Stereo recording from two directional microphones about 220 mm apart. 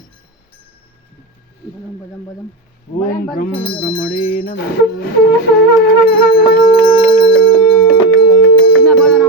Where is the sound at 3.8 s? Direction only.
40° left (ahead or behind).